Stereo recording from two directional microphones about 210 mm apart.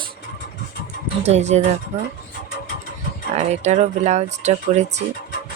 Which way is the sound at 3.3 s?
30° right (ahead or behind).